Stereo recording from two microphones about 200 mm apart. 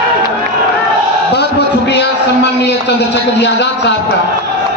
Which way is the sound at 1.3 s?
55° left (ahead or behind).